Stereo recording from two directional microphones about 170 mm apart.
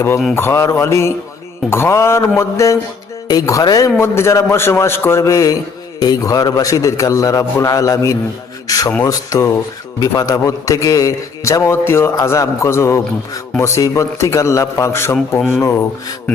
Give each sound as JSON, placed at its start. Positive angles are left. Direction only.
{"t": 0.3, "sound": "a man's voice", "side_deg": 15}